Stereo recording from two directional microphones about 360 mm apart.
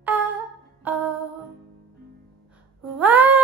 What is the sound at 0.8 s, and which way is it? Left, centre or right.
Music, centre.